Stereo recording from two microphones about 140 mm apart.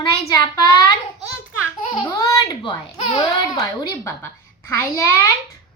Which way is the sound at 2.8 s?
35° left (ahead or behind).